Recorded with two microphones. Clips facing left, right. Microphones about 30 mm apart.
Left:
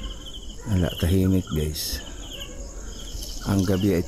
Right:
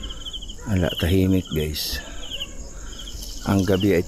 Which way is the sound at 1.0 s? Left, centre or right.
Right.